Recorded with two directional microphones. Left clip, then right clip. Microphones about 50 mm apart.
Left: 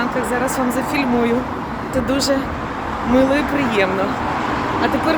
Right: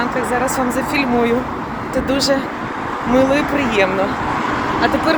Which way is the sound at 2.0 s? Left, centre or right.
Left.